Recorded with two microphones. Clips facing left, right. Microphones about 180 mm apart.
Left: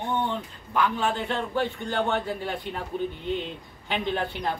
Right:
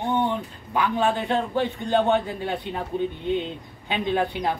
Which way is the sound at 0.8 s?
15° right (ahead or behind).